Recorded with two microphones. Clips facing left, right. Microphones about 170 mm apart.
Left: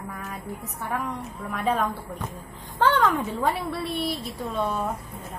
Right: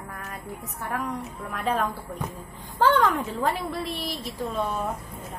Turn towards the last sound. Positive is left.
turn(degrees=0)  # may be behind; listen again after turning